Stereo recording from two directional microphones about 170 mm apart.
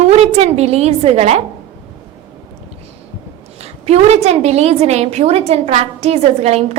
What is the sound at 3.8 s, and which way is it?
A woman's voice, 40° right (ahead or behind).